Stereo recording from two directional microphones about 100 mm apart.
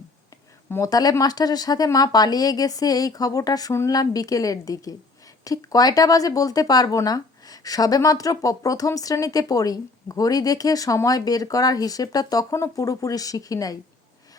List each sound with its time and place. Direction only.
0.9 s speech: 40° left (ahead or behind)